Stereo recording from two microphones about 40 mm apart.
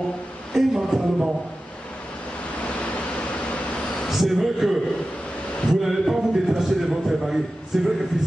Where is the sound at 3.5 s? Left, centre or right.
Left.